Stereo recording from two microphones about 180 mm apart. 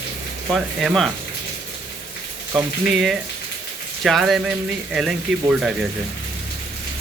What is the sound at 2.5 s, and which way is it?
Speech, centre (ahead or behind).